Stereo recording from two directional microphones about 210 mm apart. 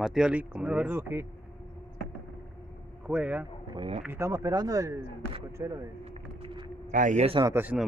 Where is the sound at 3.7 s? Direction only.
25° right (ahead or behind).